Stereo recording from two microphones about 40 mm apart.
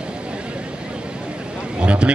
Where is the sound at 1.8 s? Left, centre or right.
Right.